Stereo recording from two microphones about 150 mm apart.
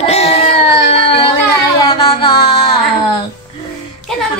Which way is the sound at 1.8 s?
35° left (ahead or behind).